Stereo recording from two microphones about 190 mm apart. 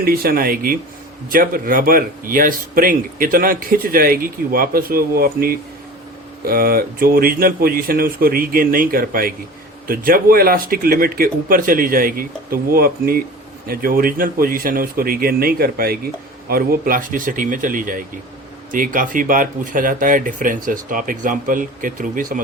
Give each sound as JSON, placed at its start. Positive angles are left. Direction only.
{"t": 0.0, "sound": "speech", "side_deg": -50}